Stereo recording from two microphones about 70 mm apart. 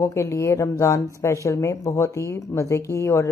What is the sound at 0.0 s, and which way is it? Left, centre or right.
Speech, left.